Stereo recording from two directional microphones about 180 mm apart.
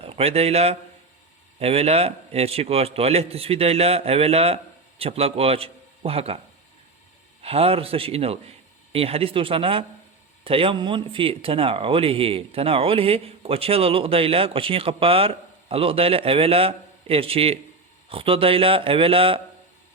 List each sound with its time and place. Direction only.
0.0 s a man's voice: 30° right (ahead or behind)
7.4 s speech: 35° right (ahead or behind)